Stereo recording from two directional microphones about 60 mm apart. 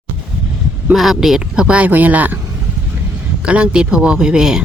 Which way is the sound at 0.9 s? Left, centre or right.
Centre.